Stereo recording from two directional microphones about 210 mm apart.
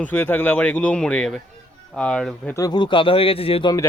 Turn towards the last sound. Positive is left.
turn(degrees=25)  # may be behind; listen again after turning